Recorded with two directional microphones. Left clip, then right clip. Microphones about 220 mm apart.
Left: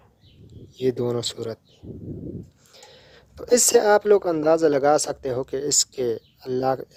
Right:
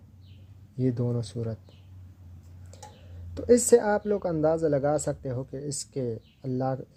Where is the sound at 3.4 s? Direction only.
25° left (ahead or behind).